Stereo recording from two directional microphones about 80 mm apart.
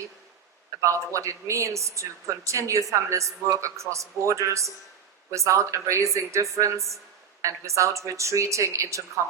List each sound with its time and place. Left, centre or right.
0.8 s a woman's voice: right